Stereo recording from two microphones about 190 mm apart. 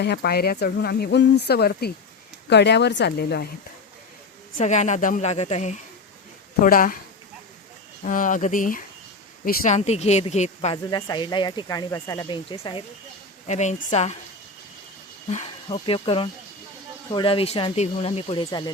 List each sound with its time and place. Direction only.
0.0 s speech: 60° left (ahead or behind)
4.5 s speech: 40° left (ahead or behind)
6.6 s speech: 45° left (ahead or behind)
8.0 s speech: 45° left (ahead or behind)
10.9 s speech: 20° left (ahead or behind)
13.5 s speech: 40° left (ahead or behind)
15.3 s speech: 35° left (ahead or behind)